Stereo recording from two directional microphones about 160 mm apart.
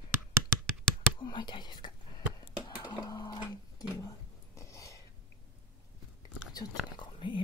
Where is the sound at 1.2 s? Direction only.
30° left (ahead or behind).